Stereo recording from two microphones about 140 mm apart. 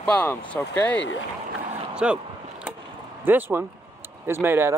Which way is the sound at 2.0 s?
5° right (ahead or behind).